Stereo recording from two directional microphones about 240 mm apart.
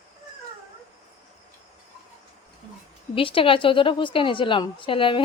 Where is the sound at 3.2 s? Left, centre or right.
Left.